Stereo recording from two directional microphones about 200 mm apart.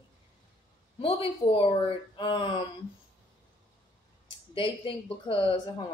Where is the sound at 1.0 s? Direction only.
30° left (ahead or behind).